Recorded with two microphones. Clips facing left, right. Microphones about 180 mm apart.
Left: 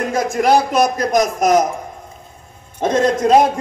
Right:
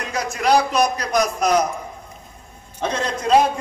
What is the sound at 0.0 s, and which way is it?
A man's voice, 50° left (ahead or behind).